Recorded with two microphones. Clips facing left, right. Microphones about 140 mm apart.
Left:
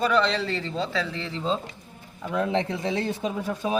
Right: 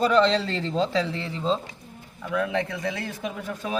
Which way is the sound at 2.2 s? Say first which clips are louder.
Left 1 dB; 25° left (ahead or behind).